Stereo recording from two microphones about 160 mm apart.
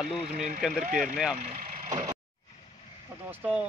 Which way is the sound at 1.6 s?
50° right (ahead or behind).